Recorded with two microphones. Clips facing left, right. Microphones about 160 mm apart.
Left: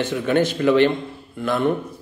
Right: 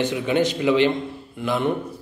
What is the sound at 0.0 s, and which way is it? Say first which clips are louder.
A man's voice: left 1 dB; 15° right (ahead or behind).